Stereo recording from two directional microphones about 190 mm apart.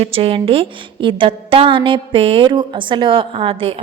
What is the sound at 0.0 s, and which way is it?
A woman's voice, 30° right (ahead or behind).